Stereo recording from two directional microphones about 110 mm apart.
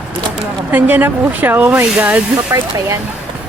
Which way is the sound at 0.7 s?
15° right (ahead or behind).